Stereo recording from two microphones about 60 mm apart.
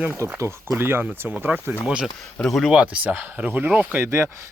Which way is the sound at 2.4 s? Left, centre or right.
Centre.